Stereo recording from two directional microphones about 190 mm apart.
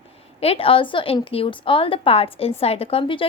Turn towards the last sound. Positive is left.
turn(degrees=30)  # may be behind; listen again after turning